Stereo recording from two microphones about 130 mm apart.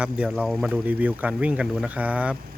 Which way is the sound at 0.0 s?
10° right (ahead or behind).